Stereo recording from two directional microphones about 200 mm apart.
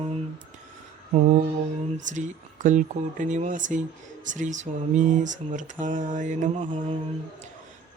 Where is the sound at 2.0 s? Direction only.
40° right (ahead or behind).